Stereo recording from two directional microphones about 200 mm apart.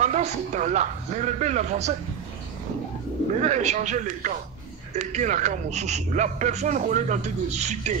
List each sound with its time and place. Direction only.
0.0 s a man's voice: 35° right (ahead or behind)
3.3 s a man's voice: 35° right (ahead or behind)